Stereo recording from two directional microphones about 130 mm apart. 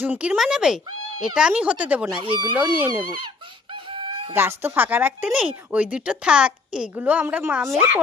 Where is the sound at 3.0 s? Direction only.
40° right (ahead or behind).